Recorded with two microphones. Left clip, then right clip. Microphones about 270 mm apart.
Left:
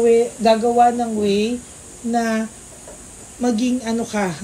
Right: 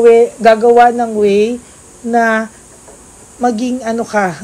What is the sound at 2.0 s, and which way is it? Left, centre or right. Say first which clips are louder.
Speech: right 9 dB; right.